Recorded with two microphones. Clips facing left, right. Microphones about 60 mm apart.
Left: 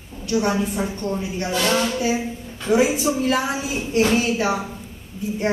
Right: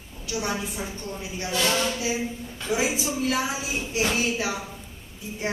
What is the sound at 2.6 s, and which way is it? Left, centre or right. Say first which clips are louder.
A woman's voice: left 8 dB; left.